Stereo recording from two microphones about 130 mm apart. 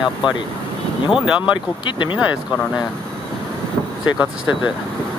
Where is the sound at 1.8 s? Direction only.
35° left (ahead or behind).